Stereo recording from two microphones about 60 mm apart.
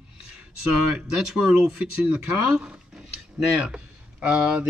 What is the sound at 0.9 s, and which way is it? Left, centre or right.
Speech, centre.